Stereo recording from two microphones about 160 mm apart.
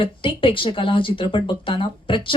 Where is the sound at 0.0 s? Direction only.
35° left (ahead or behind).